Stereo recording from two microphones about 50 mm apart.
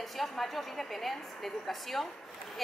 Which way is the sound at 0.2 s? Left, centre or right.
Centre.